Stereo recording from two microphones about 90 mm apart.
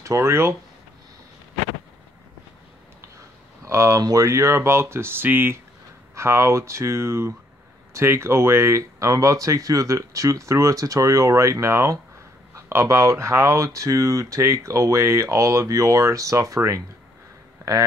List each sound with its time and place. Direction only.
0.0 s speech: 30° right (ahead or behind)
3.6 s speech: 35° right (ahead or behind)